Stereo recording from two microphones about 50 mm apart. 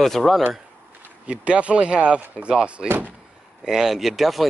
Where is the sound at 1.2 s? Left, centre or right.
Right.